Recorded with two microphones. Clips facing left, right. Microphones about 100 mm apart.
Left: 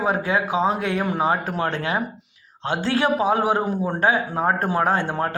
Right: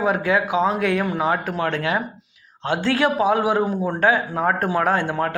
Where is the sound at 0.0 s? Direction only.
30° left (ahead or behind).